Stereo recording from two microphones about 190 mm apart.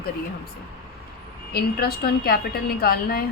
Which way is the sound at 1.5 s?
55° left (ahead or behind).